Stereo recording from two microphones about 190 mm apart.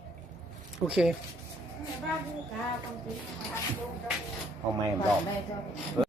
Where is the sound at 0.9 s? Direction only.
5° right (ahead or behind).